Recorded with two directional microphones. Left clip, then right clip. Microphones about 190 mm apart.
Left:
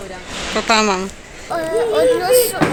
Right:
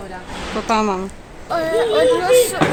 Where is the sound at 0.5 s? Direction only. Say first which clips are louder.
Left 3 dB; 5° right (ahead or behind).